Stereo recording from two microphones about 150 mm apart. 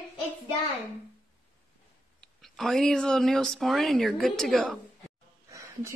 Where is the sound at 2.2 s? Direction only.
Centre (ahead or behind).